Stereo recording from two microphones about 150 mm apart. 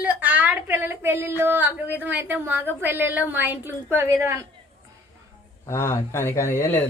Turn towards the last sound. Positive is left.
turn(degrees=15)  # may be behind; listen again after turning